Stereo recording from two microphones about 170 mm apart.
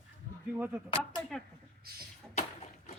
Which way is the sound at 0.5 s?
10° right (ahead or behind).